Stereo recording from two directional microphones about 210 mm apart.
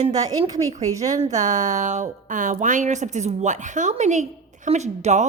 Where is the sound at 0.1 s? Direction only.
15° right (ahead or behind).